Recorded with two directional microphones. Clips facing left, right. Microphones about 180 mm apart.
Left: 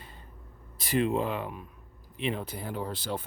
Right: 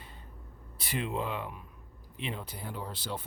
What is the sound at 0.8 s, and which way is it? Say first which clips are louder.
Speech: left 7 dB; 45° left (ahead or behind).